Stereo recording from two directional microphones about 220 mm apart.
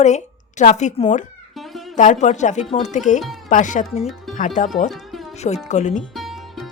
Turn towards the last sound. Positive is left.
turn(degrees=0)  # may be behind; listen again after turning